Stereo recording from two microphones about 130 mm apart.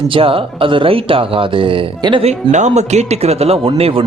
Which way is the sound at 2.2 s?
65° right (ahead or behind).